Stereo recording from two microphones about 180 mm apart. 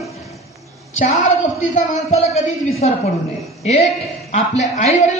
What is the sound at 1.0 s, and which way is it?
A woman's voice, 45° left (ahead or behind).